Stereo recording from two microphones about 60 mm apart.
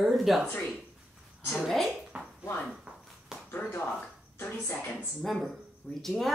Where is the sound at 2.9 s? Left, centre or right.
Centre.